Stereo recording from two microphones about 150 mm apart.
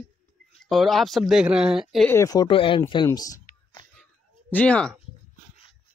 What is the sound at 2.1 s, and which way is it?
Speech, 20° left (ahead or behind).